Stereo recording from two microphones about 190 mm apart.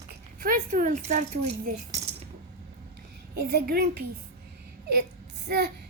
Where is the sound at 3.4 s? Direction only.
55° right (ahead or behind).